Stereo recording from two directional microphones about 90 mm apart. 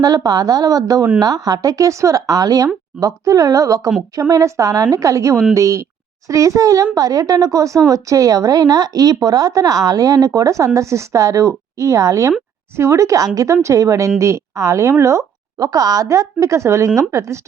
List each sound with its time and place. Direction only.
0.0 s a woman's voice: 45° right (ahead or behind)